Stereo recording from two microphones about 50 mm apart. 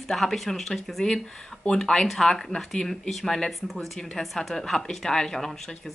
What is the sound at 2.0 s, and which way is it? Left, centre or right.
Speech, centre.